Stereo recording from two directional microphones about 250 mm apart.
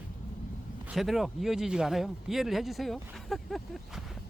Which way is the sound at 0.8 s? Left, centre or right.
Centre.